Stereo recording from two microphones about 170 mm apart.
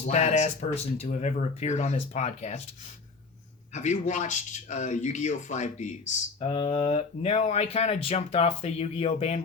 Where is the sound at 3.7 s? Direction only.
45° left (ahead or behind).